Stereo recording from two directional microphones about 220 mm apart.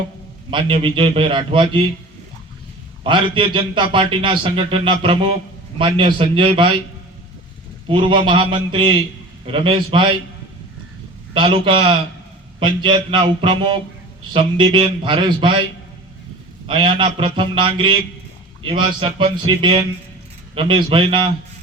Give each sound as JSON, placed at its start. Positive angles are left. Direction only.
{"t": 0.5, "sound": "a man's voice", "side_deg": -20}
{"t": 3.0, "sound": "a man's voice", "side_deg": -20}
{"t": 7.9, "sound": "a man's voice", "side_deg": -25}
{"t": 11.3, "sound": "a man's voice", "side_deg": -20}
{"t": 16.6, "sound": "a man's voice", "side_deg": -25}